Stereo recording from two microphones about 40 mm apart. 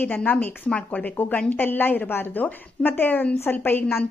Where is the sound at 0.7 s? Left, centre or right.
Left.